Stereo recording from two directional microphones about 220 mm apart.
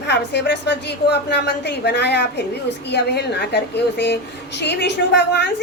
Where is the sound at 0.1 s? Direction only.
50° left (ahead or behind).